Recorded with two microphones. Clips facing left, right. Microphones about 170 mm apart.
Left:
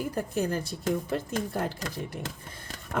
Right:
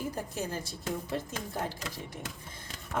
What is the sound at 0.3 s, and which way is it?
Speech, 60° left (ahead or behind).